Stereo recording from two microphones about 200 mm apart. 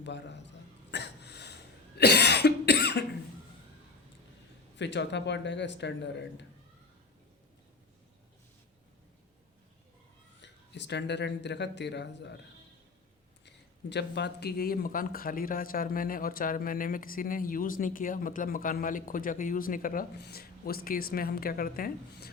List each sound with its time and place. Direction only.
0.0 s a sound: 60° left (ahead or behind)
2.0 s cough: 55° left (ahead or behind)
4.8 s speech: 60° left (ahead or behind)
10.4 s speech: 60° left (ahead or behind)
13.9 s speech: 60° left (ahead or behind)